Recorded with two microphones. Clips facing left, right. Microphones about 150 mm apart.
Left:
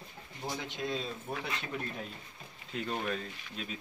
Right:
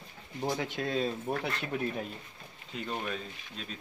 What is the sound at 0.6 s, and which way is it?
Speech, 50° right (ahead or behind).